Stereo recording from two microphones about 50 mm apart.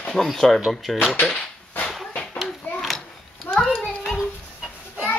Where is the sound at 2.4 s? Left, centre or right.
Left.